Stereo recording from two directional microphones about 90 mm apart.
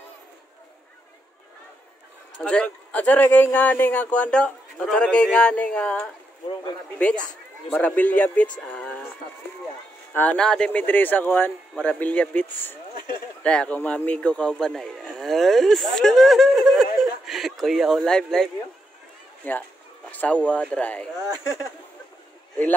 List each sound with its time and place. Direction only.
2.3 s a man's voice: 10° left (ahead or behind)
7.7 s a man's voice: 15° left (ahead or behind)
10.3 s a man's voice: 10° left (ahead or behind)
10.8 s a man's voice: 20° left (ahead or behind); by 16.8 s centre (ahead or behind)
17.3 s a sound: 5° right (ahead or behind)
18.0 s a man's voice: 5° left (ahead or behind)
19.4 s a man's voice: 20° left (ahead or behind)